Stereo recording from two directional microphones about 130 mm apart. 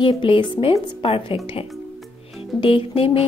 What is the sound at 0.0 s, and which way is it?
A woman's voice, 40° left (ahead or behind).